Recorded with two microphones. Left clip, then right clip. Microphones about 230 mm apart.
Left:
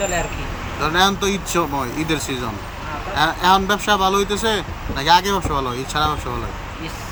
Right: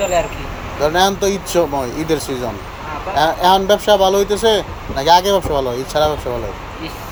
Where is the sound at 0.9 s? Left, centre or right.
Centre.